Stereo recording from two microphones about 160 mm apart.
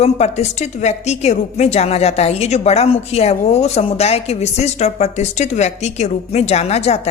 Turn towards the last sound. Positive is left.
turn(degrees=40)  # may be behind; listen again after turning